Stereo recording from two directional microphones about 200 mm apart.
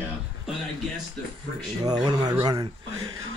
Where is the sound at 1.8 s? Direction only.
20° right (ahead or behind).